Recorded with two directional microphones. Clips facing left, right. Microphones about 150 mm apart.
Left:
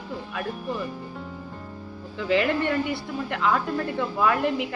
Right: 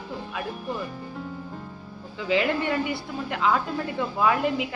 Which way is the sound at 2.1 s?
10° right (ahead or behind).